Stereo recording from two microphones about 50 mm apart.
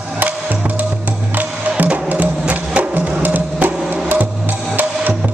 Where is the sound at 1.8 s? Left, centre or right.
Right.